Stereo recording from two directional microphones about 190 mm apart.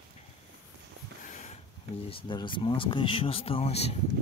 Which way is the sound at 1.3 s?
35° left (ahead or behind).